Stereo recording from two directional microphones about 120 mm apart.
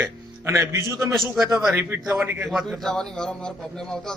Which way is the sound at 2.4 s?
Centre (ahead or behind).